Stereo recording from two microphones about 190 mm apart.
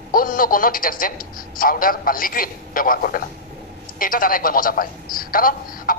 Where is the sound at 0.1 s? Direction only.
50° left (ahead or behind).